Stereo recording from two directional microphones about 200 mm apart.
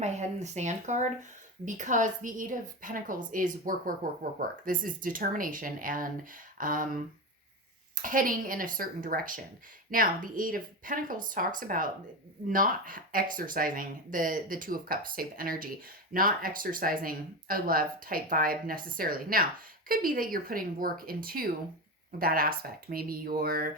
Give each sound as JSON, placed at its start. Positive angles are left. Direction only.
{"t": 0.0, "sound": "a woman's voice", "side_deg": -35}
{"t": 8.0, "sound": "a woman's voice", "side_deg": -45}